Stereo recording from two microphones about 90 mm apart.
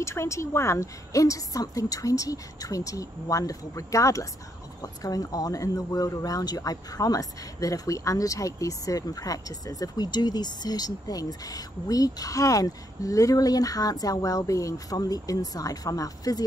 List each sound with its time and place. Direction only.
0.0 s speech: 30° left (ahead or behind)